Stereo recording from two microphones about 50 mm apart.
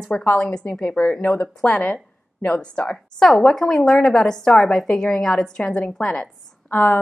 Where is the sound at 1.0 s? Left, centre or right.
Left.